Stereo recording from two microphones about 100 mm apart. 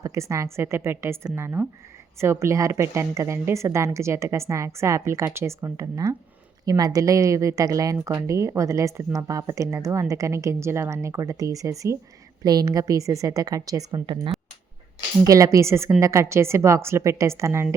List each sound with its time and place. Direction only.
0.0 s a woman's voice: 30° right (ahead or behind)
15.2 s a woman's voice: 30° right (ahead or behind)